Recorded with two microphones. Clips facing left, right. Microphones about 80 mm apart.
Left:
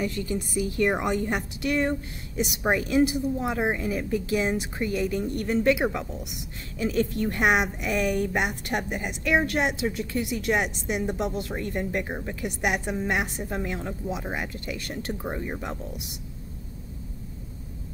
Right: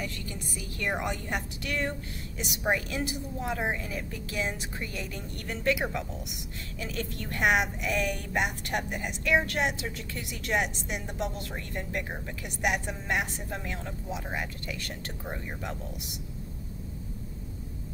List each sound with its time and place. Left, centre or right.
0.0 s a woman's voice: centre